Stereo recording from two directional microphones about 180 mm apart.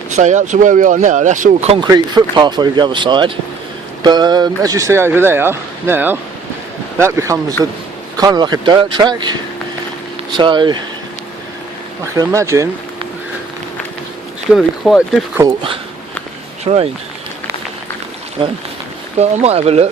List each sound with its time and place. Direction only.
0.1 s speech: 40° right (ahead or behind)
1.8 s speech: 25° right (ahead or behind)
10.3 s speech: 25° right (ahead or behind)
12.1 s speech: 15° right (ahead or behind)
14.5 s speech: 5° right (ahead or behind)
15.4 s speech: 15° right (ahead or behind)
16.6 s speech: 35° right (ahead or behind)
19.2 s speech: 35° right (ahead or behind)